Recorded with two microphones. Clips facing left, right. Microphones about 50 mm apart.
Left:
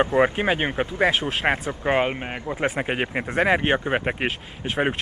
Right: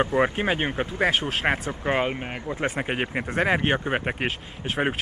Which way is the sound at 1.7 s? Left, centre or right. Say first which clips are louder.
Left 3 dB; centre.